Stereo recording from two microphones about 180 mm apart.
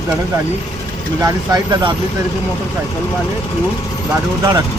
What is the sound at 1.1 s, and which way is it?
Speech, 20° right (ahead or behind).